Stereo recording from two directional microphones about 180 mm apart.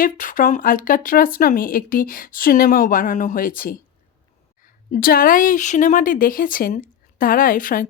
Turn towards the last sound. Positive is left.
turn(degrees=50)  # may be behind; listen again after turning